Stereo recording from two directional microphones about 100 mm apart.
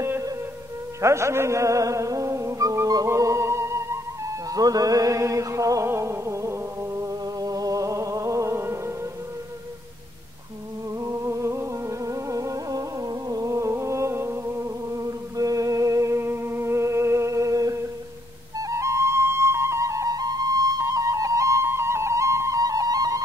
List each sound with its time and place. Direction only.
0.0 s music: 30° right (ahead or behind)
11.0 s music: 30° right (ahead or behind)
18.6 s flute: 30° right (ahead or behind)